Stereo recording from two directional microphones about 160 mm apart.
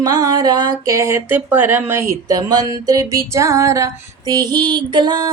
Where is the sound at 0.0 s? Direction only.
25° right (ahead or behind).